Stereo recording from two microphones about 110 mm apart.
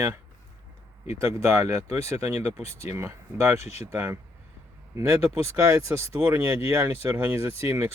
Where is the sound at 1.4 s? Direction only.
25° right (ahead or behind).